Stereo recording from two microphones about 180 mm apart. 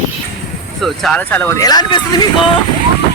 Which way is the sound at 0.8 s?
Centre (ahead or behind).